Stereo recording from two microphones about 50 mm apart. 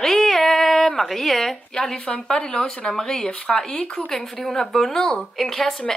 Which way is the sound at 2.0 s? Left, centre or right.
Left.